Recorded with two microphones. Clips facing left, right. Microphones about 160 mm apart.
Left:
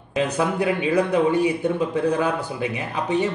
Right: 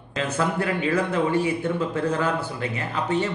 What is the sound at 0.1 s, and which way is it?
Speech, 15° left (ahead or behind).